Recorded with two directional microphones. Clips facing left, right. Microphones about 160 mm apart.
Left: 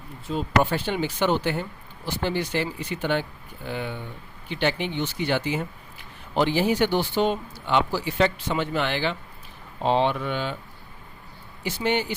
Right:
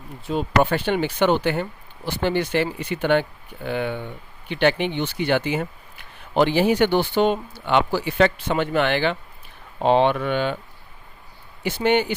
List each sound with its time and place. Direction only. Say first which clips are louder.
0.3 s speech: right 3 dB; 65° right (ahead or behind)
11.6 s speech: right 5 dB; 60° right (ahead or behind)